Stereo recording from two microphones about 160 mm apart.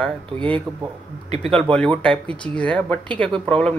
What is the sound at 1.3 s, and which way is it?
Speech, 35° right (ahead or behind).